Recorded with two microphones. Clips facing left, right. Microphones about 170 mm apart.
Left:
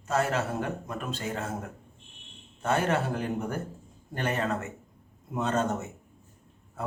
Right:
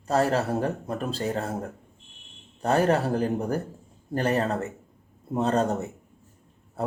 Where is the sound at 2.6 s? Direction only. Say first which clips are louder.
Right 5 dB; 35° right (ahead or behind).